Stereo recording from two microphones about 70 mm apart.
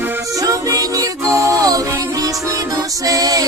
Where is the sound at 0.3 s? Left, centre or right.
Right.